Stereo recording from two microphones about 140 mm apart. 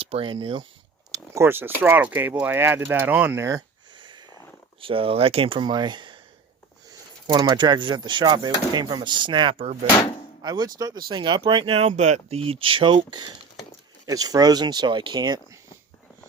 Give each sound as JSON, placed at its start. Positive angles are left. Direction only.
{"t": 0.0, "sound": "speech", "side_deg": -40}
{"t": 1.1, "sound": "speech", "side_deg": -20}
{"t": 3.9, "sound": "snort", "side_deg": -35}
{"t": 4.8, "sound": "speech", "side_deg": -40}
{"t": 7.3, "sound": "speech", "side_deg": -30}